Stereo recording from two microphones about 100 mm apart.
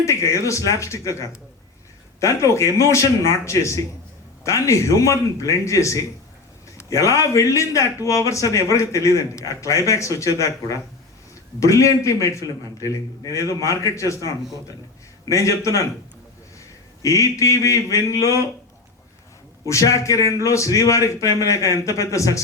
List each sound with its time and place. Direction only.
0.0 s a man's voice: 30° left (ahead or behind)
15.3 s a man's voice: 30° left (ahead or behind)
17.0 s a man's voice: 30° left (ahead or behind)
19.6 s a man's voice: 30° left (ahead or behind)